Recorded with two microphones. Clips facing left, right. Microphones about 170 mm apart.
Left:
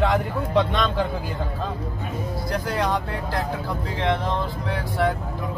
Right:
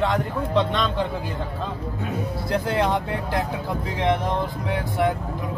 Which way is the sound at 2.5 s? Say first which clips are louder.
Right 3 dB; 25° right (ahead or behind).